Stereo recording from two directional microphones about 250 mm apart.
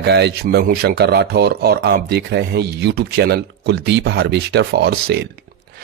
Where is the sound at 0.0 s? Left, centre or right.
Right.